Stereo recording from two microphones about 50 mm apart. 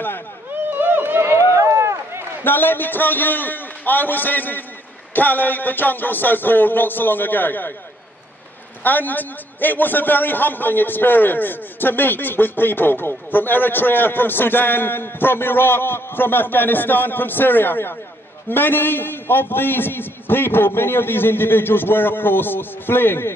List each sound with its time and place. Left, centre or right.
0.7 s run: right
2.4 s a man's voice: left
8.8 s a man's voice: left